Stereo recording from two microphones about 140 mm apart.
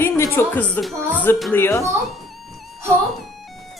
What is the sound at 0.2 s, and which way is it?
A woman's voice, 15° left (ahead or behind).